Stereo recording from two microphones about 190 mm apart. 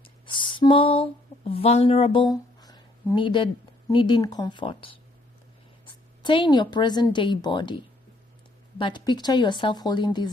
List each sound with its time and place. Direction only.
0.3 s speech: 25° left (ahead or behind)
2.6 s a sound: 20° left (ahead or behind)
3.9 s a woman's voice: 25° left (ahead or behind)
8.8 s speech: 25° left (ahead or behind)